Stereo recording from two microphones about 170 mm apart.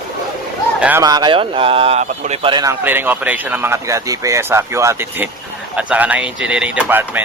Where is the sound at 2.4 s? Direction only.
25° right (ahead or behind).